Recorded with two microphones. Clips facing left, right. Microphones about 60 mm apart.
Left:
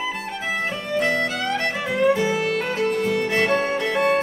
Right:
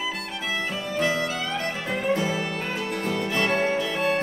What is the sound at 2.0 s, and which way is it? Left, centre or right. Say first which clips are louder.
Music: left 6 dB; left.